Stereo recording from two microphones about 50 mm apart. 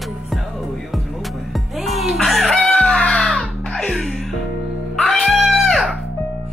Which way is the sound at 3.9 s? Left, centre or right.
Centre.